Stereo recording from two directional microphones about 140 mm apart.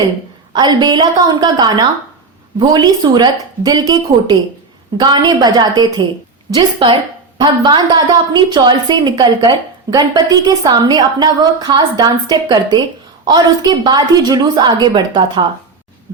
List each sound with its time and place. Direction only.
0.5 s a woman's voice: 30° right (ahead or behind)